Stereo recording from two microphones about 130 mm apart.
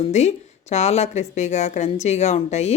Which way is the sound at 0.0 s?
60° left (ahead or behind).